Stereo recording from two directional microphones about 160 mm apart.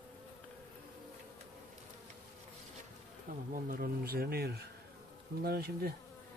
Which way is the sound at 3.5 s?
60° right (ahead or behind).